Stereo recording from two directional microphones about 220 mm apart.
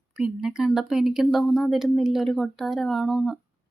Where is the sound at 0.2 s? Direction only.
5° right (ahead or behind).